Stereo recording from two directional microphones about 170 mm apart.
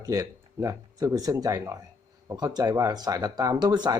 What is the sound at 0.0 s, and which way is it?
Speech, 20° right (ahead or behind).